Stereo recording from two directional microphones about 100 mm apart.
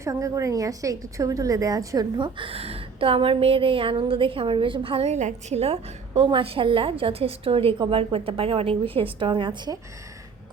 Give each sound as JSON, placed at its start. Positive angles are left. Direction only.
{"t": 0.0, "sound": "a woman's voice", "side_deg": -35}
{"t": 2.1, "sound": "a woman's voice", "side_deg": -55}
{"t": 5.5, "sound": "a woman's voice", "side_deg": -85}
{"t": 9.1, "sound": "a woman's voice", "side_deg": -55}